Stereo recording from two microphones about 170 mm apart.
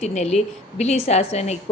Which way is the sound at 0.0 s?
40° left (ahead or behind).